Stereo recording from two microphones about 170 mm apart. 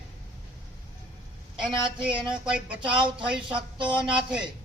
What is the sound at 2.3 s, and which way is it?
A woman's voice, 5° right (ahead or behind).